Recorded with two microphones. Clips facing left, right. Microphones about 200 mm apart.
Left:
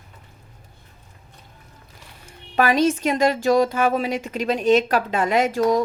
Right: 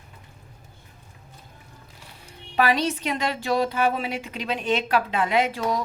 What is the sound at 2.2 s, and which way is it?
Speech, 45° left (ahead or behind).